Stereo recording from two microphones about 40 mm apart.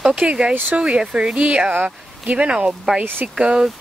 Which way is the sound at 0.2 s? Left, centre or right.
Right.